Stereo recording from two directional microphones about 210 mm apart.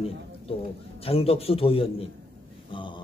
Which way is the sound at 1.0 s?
30° left (ahead or behind).